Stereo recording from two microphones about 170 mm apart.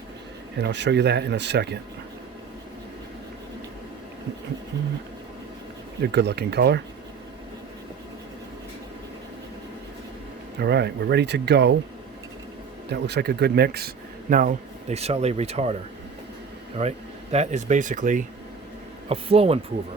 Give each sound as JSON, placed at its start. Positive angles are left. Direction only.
{"t": 0.6, "sound": "speech", "side_deg": -90}
{"t": 6.0, "sound": "speech", "side_deg": -75}
{"t": 10.6, "sound": "speech", "side_deg": -80}
{"t": 12.9, "sound": "speech", "side_deg": -80}
{"t": 17.3, "sound": "speech", "side_deg": -45}
{"t": 19.0, "sound": "speech", "side_deg": -35}